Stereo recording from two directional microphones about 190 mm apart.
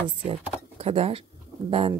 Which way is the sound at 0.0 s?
30° right (ahead or behind).